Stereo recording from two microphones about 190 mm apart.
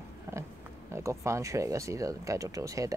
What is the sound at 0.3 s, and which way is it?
Pig, 15° right (ahead or behind).